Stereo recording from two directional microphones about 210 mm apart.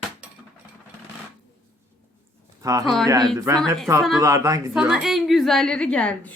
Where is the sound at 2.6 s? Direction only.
15° right (ahead or behind).